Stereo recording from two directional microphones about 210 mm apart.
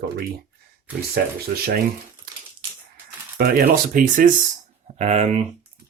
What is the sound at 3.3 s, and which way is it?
Speech, 45° right (ahead or behind).